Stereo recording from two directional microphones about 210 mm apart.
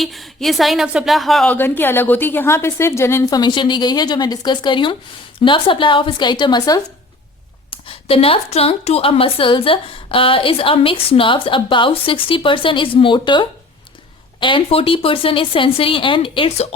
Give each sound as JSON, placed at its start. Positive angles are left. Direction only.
{"t": 0.0, "sound": "a woman's voice", "side_deg": 0}